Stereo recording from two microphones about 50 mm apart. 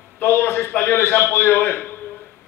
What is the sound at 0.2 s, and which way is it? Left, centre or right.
A man's voice, left.